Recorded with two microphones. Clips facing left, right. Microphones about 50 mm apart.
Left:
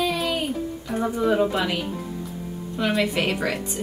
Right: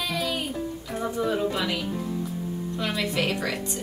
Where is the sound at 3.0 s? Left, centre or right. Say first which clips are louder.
Left 3 dB; centre.